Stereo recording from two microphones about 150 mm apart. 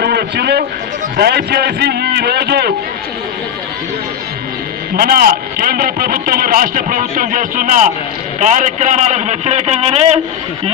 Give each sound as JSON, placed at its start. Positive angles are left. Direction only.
{"t": 0.0, "sound": "a man's voice", "side_deg": -90}
{"t": 4.9, "sound": "a man's voice", "side_deg": -80}